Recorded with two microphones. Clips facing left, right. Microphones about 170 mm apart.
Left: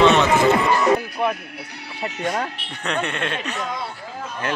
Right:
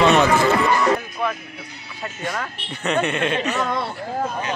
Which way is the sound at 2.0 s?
70° left (ahead or behind).